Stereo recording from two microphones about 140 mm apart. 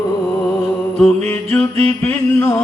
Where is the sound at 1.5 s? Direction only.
10° left (ahead or behind).